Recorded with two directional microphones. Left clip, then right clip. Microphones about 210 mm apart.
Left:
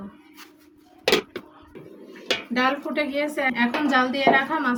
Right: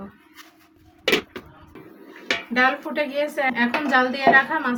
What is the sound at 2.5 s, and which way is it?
A woman's voice, 10° right (ahead or behind).